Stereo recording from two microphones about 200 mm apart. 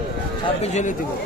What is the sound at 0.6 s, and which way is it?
Speech, 35° left (ahead or behind).